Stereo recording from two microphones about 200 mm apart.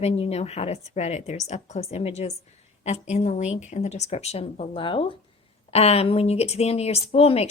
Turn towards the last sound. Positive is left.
turn(degrees=30)  # may be behind; listen again after turning